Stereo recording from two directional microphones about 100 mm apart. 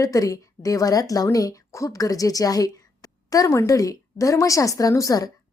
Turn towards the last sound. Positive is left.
turn(degrees=35)  # may be behind; listen again after turning